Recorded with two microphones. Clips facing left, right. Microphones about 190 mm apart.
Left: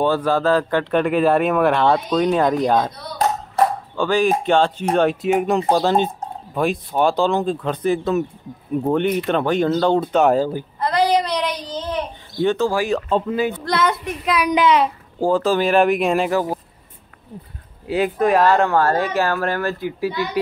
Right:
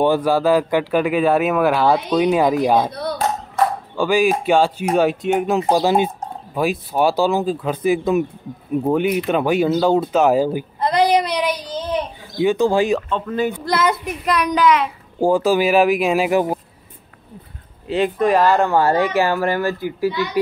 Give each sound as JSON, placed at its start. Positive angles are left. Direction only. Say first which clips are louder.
{"t": 0.0, "sound": "speech", "louder": "right 2 dB", "side_deg": -15}
{"t": 2.9, "sound": "clapping", "louder": "right 9 dB", "side_deg": -60}
{"t": 3.9, "sound": "speech", "louder": "right 1 dB", "side_deg": -10}
{"t": 13.5, "sound": "speech", "louder": "right 1 dB", "side_deg": -5}
{"t": 14.5, "sound": "a child's voice", "louder": "left 1 dB", "side_deg": 30}
{"t": 15.1, "sound": "speech", "louder": "right 2 dB", "side_deg": -10}
{"t": 16.3, "sound": "speech", "louder": "right 3 dB", "side_deg": -15}
{"t": 17.8, "sound": "speech", "louder": "right 1 dB", "side_deg": 5}
{"t": 18.8, "sound": "speech", "louder": "right 2 dB", "side_deg": -10}